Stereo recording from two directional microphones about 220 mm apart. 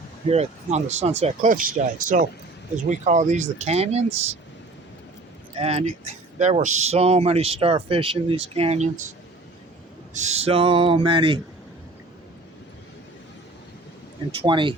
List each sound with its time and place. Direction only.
0.3 s speech: 30° right (ahead or behind)
5.5 s speech: 25° right (ahead or behind)
10.2 s speech: 30° right (ahead or behind)
14.4 s speech: 20° right (ahead or behind)